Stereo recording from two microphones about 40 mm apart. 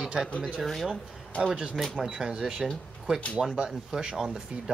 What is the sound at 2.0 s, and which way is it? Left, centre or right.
Speech, centre.